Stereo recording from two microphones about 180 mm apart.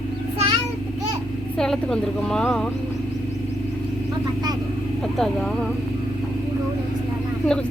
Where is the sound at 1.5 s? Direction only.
5° left (ahead or behind).